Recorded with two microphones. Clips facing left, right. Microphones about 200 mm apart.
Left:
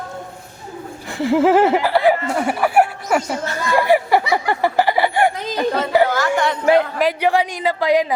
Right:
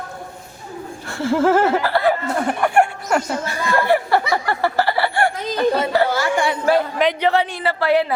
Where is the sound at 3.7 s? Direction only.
15° left (ahead or behind).